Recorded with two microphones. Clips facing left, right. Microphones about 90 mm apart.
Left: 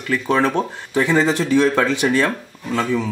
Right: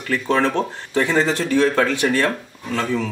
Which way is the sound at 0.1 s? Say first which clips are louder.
Left 1 dB; 10° left (ahead or behind).